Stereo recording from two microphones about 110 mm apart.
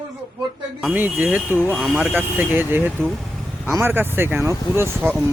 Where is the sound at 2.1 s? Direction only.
15° right (ahead or behind).